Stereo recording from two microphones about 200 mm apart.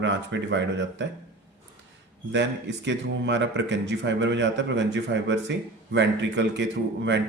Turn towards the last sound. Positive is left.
turn(degrees=-60)  # may be behind; listen again after turning